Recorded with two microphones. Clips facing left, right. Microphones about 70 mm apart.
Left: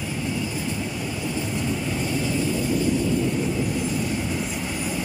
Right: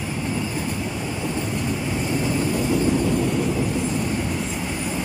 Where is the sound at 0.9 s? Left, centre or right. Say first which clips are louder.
Right 2 dB; right.